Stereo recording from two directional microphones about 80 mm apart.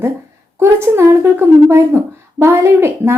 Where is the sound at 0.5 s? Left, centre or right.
Right.